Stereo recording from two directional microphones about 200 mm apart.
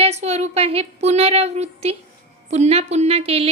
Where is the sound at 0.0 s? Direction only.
30° right (ahead or behind).